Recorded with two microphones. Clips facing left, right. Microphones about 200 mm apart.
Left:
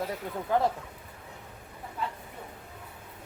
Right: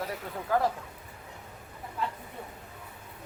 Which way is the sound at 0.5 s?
20° left (ahead or behind).